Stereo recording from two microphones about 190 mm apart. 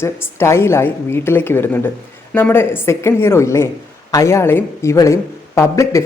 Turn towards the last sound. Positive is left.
turn(degrees=15)  # may be behind; listen again after turning